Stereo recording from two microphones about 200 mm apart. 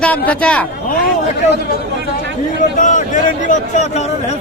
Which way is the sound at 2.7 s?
40° left (ahead or behind).